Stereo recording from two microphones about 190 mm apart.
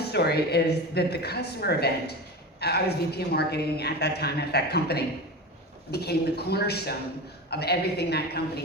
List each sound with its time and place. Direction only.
0.0 s a woman's voice: 60° left (ahead or behind)